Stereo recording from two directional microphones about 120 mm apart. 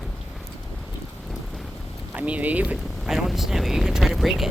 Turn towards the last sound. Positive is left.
turn(degrees=0)  # may be behind; listen again after turning